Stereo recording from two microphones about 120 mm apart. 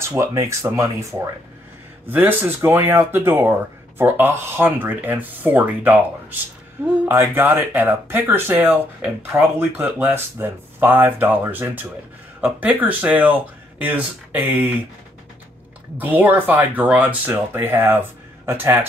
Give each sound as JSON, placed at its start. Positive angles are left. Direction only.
{"t": 0.0, "sound": "speech", "side_deg": -20}
{"t": 7.1, "sound": "speech", "side_deg": -20}
{"t": 16.0, "sound": "speech", "side_deg": -15}